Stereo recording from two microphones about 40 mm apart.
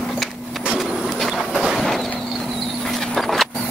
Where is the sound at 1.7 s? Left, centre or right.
Centre.